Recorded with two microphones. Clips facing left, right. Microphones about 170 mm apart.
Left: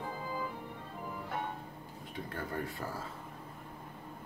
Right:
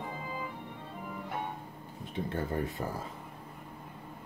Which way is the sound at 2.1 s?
25° right (ahead or behind).